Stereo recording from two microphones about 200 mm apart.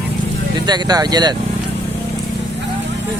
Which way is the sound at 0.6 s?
20° right (ahead or behind).